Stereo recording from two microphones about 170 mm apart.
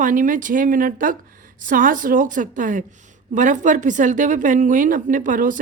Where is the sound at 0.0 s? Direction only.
50° right (ahead or behind).